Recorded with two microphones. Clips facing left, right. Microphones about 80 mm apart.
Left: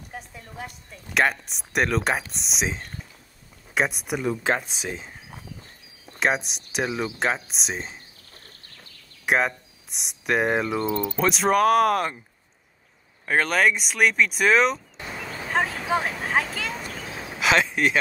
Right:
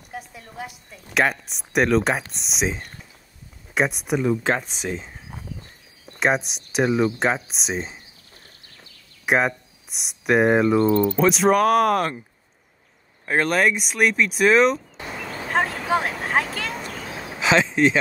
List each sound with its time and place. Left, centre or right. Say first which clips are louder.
0.1 s a woman's voice: right 4 dB; centre
9.2 s speech: right 2 dB; centre
13.2 s speech: right 1 dB; centre
15.1 s a sound: right 2 dB; centre
15.9 s vehicle: right 2 dB; centre
17.2 s a sound: right 2 dB; right